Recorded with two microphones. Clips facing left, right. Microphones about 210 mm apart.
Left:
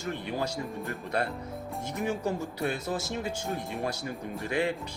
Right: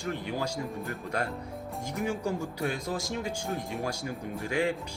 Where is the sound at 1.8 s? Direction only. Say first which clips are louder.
Left 1 dB; 10° right (ahead or behind).